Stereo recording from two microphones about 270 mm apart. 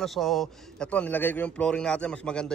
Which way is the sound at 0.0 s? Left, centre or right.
Centre.